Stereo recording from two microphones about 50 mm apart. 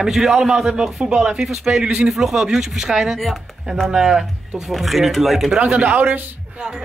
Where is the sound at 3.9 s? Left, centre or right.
Centre.